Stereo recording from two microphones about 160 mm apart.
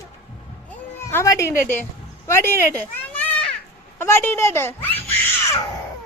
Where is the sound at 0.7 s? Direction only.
15° left (ahead or behind).